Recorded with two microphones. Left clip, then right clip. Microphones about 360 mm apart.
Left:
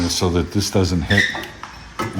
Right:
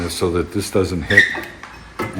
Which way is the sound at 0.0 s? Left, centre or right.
Left.